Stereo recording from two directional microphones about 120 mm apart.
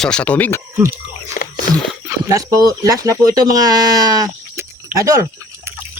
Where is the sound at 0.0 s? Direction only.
10° left (ahead or behind).